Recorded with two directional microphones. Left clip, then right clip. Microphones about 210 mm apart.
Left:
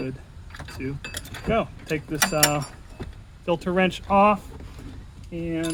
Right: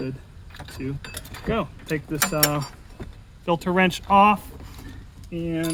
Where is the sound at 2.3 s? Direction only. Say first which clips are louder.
Left 2 dB; 30° right (ahead or behind).